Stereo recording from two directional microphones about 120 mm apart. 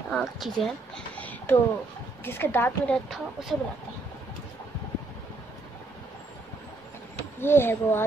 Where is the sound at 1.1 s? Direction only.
15° left (ahead or behind).